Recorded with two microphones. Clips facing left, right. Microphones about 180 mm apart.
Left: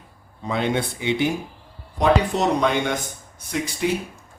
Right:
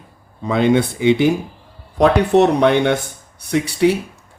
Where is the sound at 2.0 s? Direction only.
65° right (ahead or behind).